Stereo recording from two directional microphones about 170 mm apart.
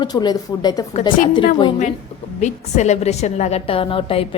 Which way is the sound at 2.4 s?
45° left (ahead or behind).